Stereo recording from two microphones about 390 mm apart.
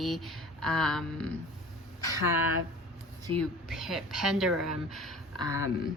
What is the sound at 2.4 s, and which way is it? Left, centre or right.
Speech, left.